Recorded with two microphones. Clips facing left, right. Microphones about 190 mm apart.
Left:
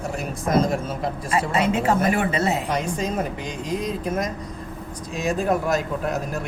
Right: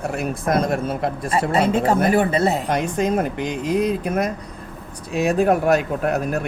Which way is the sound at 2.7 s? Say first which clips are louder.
Right 5 dB; 60° right (ahead or behind).